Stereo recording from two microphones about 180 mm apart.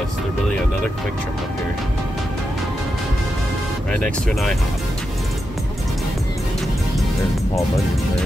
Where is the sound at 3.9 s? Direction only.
5° left (ahead or behind).